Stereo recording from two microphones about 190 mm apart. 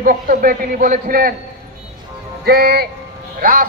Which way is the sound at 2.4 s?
55° right (ahead or behind).